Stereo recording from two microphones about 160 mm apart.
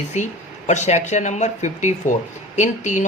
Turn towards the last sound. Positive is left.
turn(degrees=50)  # may be behind; listen again after turning